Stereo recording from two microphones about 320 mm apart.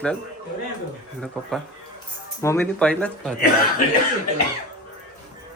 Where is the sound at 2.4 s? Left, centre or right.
Centre.